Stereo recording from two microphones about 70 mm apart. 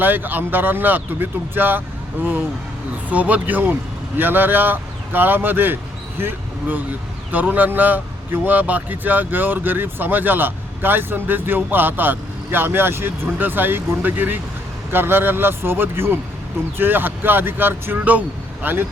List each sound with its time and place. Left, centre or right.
0.0 s speech: right
3.1 s a man's voice: right